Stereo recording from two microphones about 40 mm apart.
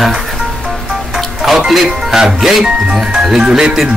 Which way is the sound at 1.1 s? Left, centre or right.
Centre.